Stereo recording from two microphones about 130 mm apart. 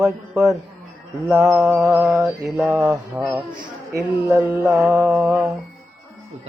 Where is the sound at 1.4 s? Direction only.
25° right (ahead or behind).